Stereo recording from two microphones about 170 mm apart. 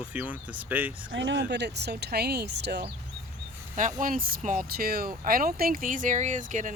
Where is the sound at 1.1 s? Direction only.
90° right.